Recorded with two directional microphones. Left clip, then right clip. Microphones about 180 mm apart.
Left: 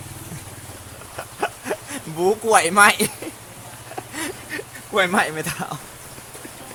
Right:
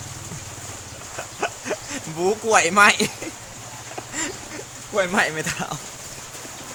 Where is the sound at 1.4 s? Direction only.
10° left (ahead or behind).